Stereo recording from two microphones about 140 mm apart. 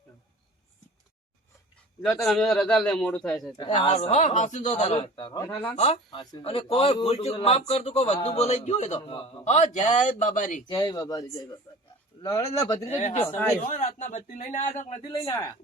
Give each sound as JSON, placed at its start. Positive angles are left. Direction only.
{"t": 2.0, "sound": "a man's voice", "side_deg": 0}
{"t": 3.6, "sound": "a man's voice", "side_deg": 35}
{"t": 4.1, "sound": "a man's voice", "side_deg": 55}
{"t": 4.9, "sound": "a man's voice", "side_deg": 35}
{"t": 5.7, "sound": "a man's voice", "side_deg": 50}
{"t": 6.1, "sound": "a man's voice", "side_deg": 40}
{"t": 9.4, "sound": "a man's voice", "side_deg": 60}
{"t": 10.7, "sound": "speech", "side_deg": 30}
{"t": 12.3, "sound": "speech", "side_deg": 25}
{"t": 13.0, "sound": "a man's voice", "side_deg": 55}
{"t": 13.2, "sound": "speech", "side_deg": 15}
{"t": 13.7, "sound": "a man's voice", "side_deg": 60}
{"t": 15.2, "sound": "speech", "side_deg": 25}